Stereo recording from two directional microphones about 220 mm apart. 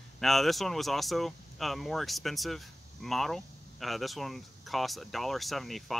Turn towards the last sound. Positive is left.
turn(degrees=0)  # may be behind; listen again after turning